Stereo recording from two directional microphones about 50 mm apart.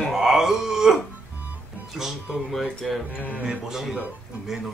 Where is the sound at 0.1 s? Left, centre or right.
Centre.